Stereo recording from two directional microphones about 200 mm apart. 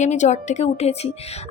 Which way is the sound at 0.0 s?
35° left (ahead or behind).